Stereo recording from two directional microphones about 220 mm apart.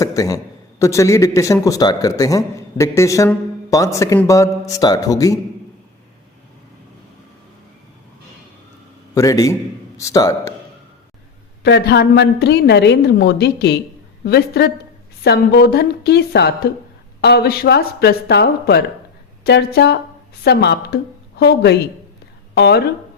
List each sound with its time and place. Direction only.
0.0 s a man's voice: 15° left (ahead or behind)
9.1 s a man's voice: 15° left (ahead or behind)
11.6 s a woman's voice: 50° left (ahead or behind)